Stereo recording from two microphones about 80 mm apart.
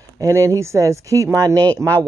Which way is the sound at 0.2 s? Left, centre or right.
Right.